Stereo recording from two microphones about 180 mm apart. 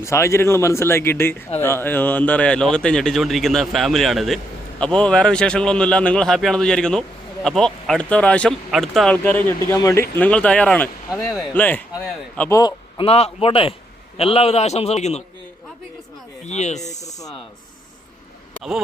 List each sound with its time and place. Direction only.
0.0 s a man's voice: 15° left (ahead or behind); by 15.2 s 40° left (ahead or behind)
16.5 s a man's voice: 40° left (ahead or behind)